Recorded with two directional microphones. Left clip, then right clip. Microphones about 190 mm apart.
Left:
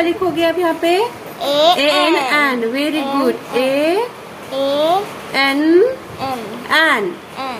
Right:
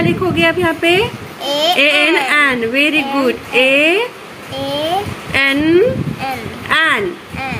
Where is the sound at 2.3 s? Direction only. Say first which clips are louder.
Right 2 dB; 15° right (ahead or behind).